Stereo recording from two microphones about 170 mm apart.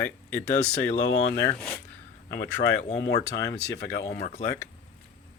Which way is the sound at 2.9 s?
80° left.